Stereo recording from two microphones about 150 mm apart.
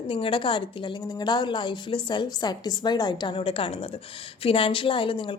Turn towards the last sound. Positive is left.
turn(degrees=35)  # may be behind; listen again after turning